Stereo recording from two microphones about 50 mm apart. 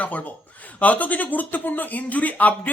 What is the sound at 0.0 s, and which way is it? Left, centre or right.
Speech, left.